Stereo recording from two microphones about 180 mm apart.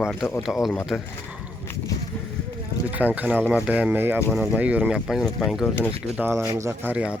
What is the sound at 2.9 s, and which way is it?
Speech, 10° right (ahead or behind).